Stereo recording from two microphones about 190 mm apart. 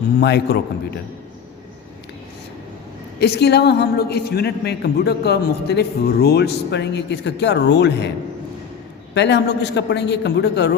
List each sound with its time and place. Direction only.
0.2 s a woman's voice: 60° left (ahead or behind)
3.2 s a woman's voice: 60° left (ahead or behind)
9.1 s a woman's voice: 65° left (ahead or behind)